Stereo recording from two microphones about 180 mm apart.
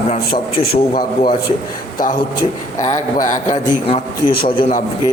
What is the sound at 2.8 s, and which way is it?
Speech, 45° left (ahead or behind).